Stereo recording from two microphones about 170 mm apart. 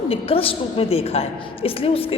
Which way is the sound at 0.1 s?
35° left (ahead or behind).